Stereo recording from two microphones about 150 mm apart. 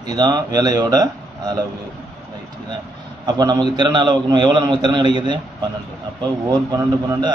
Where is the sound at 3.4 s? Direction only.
30° right (ahead or behind).